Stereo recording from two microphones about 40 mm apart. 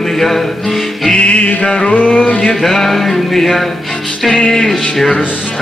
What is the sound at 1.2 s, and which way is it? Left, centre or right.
Music, left.